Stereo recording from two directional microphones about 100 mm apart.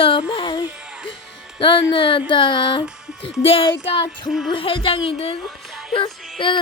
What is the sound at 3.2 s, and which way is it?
A woman's voice, 70° left (ahead or behind).